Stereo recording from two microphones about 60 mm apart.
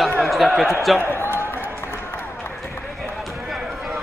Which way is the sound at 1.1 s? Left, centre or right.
Left.